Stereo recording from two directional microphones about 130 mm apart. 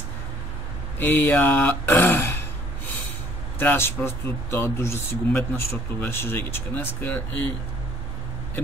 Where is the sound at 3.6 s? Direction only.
15° left (ahead or behind).